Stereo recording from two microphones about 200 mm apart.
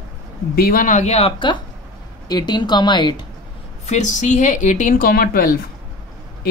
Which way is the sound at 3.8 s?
35° left (ahead or behind).